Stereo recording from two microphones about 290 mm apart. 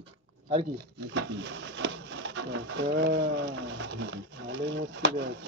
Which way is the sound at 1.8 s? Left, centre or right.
Right.